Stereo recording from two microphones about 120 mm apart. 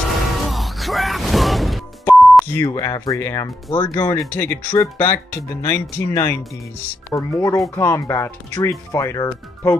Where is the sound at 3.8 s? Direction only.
20° left (ahead or behind).